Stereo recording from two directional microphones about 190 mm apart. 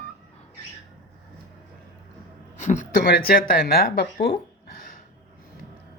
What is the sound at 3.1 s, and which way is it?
Speech, 55° left (ahead or behind).